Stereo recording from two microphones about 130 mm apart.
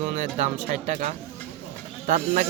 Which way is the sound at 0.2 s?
65° right (ahead or behind).